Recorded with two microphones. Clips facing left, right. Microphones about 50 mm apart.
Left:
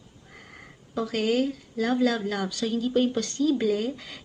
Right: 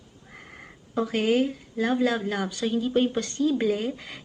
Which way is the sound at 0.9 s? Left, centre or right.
Right.